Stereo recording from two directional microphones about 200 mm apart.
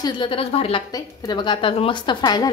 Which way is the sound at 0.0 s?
25° left (ahead or behind).